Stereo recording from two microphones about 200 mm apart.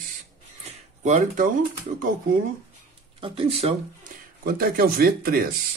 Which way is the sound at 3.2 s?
25° right (ahead or behind).